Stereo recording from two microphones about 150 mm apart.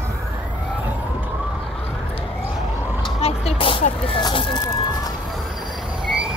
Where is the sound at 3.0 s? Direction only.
45° left (ahead or behind).